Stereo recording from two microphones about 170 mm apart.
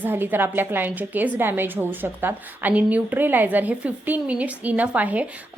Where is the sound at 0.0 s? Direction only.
10° right (ahead or behind).